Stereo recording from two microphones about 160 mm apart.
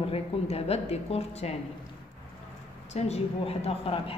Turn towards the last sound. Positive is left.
turn(degrees=35)  # may be behind; listen again after turning